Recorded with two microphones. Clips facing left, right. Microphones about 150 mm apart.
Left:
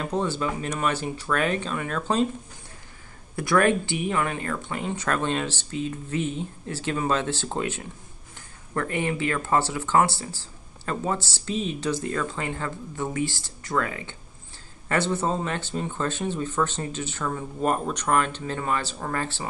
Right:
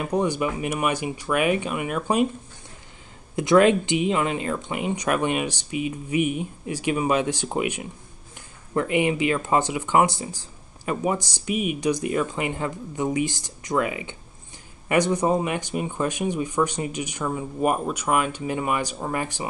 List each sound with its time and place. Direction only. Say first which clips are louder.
0.0 s speech: right 3 dB; 15° right (ahead or behind)
3.3 s speech: right 4 dB; 20° right (ahead or behind)